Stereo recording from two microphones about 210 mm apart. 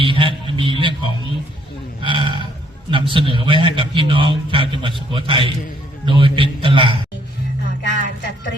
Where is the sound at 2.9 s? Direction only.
25° right (ahead or behind).